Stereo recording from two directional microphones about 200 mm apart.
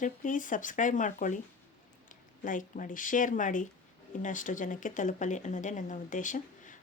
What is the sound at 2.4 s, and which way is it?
Speech, 40° left (ahead or behind).